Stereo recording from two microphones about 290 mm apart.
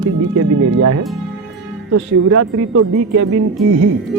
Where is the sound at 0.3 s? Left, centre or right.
Right.